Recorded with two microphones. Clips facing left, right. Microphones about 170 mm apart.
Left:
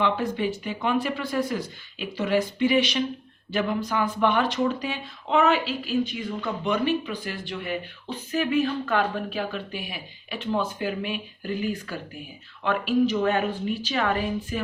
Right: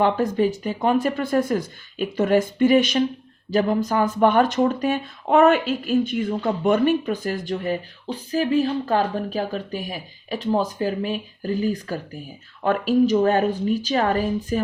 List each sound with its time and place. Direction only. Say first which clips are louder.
0.0 s speech: right 5 dB; 40° right (ahead or behind)